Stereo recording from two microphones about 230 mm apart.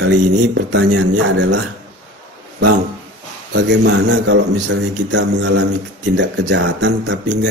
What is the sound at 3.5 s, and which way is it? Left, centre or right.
A man's voice, right.